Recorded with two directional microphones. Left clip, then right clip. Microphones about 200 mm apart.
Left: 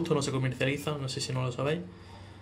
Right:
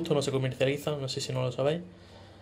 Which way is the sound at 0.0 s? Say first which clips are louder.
Right 1 dB; 15° right (ahead or behind).